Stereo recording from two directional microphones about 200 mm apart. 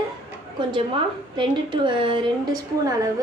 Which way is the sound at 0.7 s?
25° right (ahead or behind).